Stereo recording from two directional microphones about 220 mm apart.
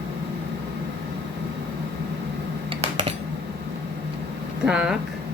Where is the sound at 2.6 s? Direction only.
25° right (ahead or behind).